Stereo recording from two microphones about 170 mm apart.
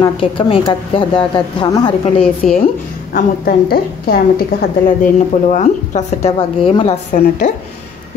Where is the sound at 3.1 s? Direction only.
60° left (ahead or behind).